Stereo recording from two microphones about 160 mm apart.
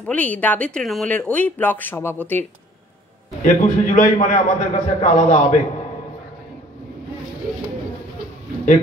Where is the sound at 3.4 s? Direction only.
50° left (ahead or behind).